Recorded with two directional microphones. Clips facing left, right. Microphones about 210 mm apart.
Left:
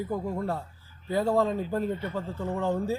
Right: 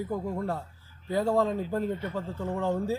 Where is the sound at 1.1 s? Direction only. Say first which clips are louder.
Left 1 dB; 5° left (ahead or behind).